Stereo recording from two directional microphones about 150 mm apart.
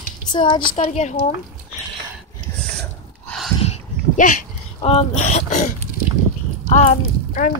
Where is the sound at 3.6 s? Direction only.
55° left (ahead or behind).